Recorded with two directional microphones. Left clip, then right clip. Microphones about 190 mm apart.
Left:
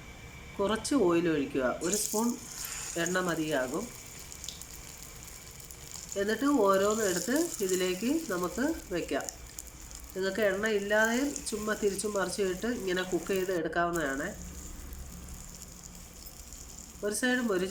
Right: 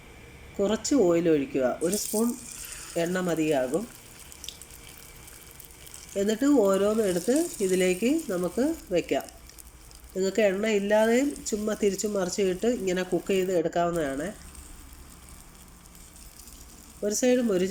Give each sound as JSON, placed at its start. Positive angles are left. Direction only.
{"t": 0.6, "sound": "speech", "side_deg": -10}
{"t": 6.1, "sound": "speech", "side_deg": -10}
{"t": 17.0, "sound": "speech", "side_deg": -10}